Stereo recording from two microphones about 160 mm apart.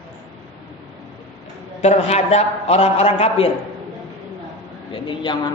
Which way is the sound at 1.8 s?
45° left (ahead or behind).